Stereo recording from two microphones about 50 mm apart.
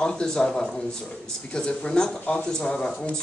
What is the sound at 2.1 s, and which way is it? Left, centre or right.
Speech, left.